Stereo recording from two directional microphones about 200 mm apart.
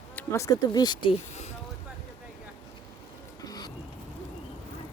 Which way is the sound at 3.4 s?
20° left (ahead or behind).